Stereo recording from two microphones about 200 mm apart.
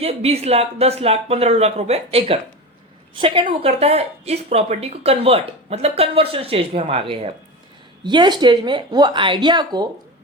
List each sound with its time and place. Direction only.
0.0 s speech: 30° right (ahead or behind)